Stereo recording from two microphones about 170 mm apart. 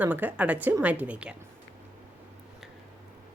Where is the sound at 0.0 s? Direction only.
10° right (ahead or behind).